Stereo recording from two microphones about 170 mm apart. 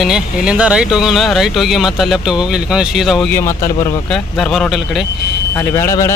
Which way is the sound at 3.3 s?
15° left (ahead or behind).